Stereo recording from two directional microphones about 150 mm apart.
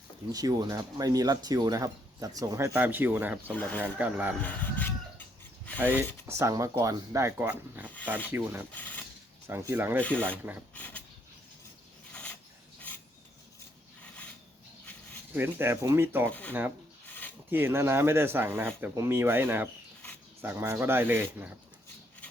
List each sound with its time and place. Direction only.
0.3 s speech: 25° right (ahead or behind)
3.5 s speech: 10° left (ahead or behind)
3.9 s speech: 10° right (ahead or behind)
4.4 s chicken: 10° left (ahead or behind)
6.2 s speech: 20° right (ahead or behind)
8.7 s speech: 10° left (ahead or behind)
9.5 s speech: 15° right (ahead or behind)
10.0 s speech: 10° left (ahead or behind)
12.1 s filing: 10° left (ahead or behind)
15.4 s speech: 15° right (ahead or behind)
16.3 s speech: 10° left (ahead or behind)
17.1 s a sound: 10° left (ahead or behind)
17.5 s speech: 15° right (ahead or behind)